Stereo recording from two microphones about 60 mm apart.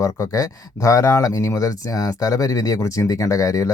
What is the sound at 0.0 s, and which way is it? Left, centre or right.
Speech, left.